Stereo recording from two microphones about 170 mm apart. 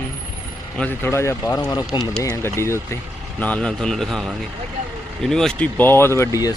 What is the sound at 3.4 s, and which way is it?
Mantra, 5° left (ahead or behind).